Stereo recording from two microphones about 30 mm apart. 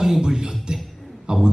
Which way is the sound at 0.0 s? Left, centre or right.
Centre.